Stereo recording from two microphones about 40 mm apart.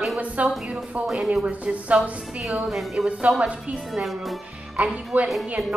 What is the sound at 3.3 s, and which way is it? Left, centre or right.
Speech, right.